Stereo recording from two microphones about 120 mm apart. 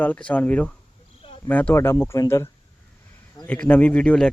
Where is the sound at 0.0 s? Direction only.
10° left (ahead or behind).